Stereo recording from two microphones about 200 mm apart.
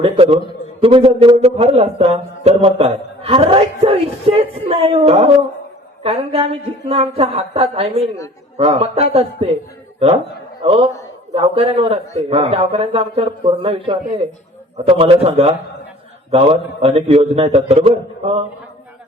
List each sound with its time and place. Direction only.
0.0 s a man's voice: 30° right (ahead or behind)
10.6 s a man's voice: 30° right (ahead or behind)